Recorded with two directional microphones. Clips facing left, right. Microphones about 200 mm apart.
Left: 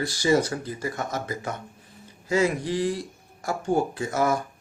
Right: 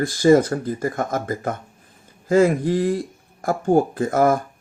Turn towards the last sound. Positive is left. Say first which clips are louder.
# right 6 dB
turn(degrees=-50)  # may be behind; listen again after turning